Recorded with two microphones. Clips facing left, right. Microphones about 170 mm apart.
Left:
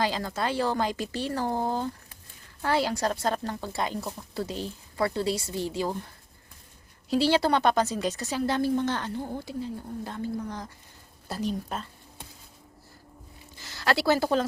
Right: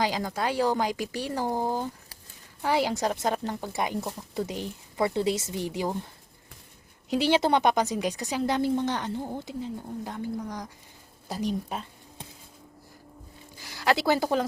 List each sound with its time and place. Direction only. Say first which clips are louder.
0.0 s a woman's voice: right 1 dB; 15° right (ahead or behind)
7.1 s a woman's voice: even; 20° right (ahead or behind)
13.6 s speech: right 1 dB; 15° right (ahead or behind)